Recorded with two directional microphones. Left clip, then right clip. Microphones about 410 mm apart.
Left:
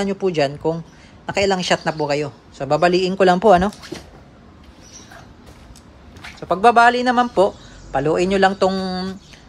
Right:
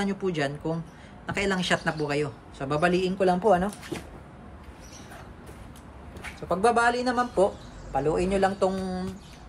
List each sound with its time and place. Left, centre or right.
0.0 s a man's voice: centre
6.5 s speech: centre